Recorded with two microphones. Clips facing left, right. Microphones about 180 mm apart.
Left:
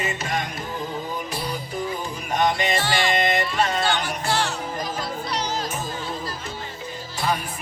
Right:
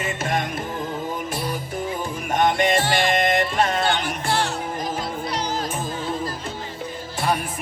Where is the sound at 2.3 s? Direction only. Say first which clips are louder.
Right 3 dB; 50° right (ahead or behind).